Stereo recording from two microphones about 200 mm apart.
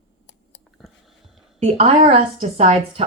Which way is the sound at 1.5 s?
30° right (ahead or behind).